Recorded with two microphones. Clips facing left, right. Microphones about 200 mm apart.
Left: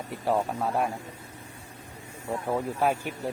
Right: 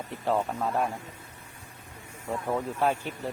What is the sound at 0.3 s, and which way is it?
Speech, 10° left (ahead or behind).